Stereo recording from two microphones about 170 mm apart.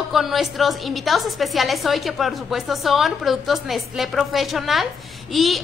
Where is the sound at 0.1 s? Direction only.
Centre (ahead or behind).